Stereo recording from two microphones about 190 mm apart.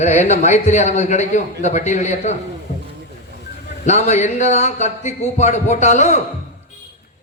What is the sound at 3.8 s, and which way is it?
A man's voice, 35° left (ahead or behind).